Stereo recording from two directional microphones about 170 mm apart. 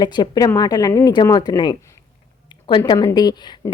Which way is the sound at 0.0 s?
25° left (ahead or behind).